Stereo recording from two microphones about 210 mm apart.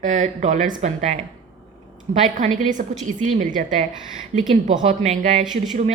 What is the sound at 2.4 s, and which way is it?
Speech, 35° right (ahead or behind).